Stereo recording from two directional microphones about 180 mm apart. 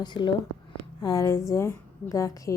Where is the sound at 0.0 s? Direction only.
25° left (ahead or behind).